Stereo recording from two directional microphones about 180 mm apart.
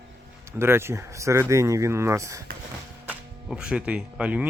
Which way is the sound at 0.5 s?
15° right (ahead or behind).